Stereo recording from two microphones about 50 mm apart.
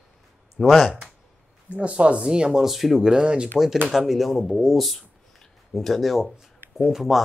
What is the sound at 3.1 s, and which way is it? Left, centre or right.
Speech, centre.